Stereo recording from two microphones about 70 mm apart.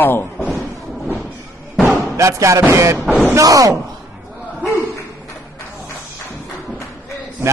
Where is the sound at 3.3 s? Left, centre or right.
Right.